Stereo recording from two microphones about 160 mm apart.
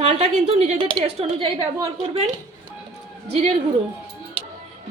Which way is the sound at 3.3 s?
40° right (ahead or behind).